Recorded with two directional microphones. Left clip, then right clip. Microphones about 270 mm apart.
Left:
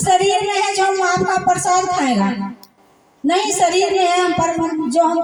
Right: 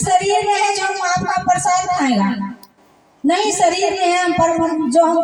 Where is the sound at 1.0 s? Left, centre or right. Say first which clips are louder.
Left 1 dB; left.